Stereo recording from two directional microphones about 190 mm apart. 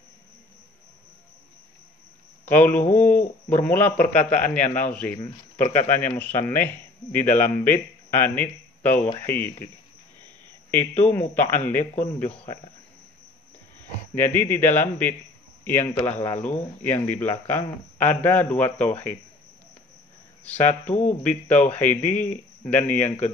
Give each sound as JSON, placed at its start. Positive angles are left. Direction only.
{"t": 2.4, "sound": "a man's voice", "side_deg": 10}
{"t": 11.1, "sound": "a man's voice", "side_deg": 10}
{"t": 11.8, "sound": "a man's voice", "side_deg": 35}
{"t": 14.1, "sound": "a man's voice", "side_deg": 10}
{"t": 20.4, "sound": "a man's voice", "side_deg": 10}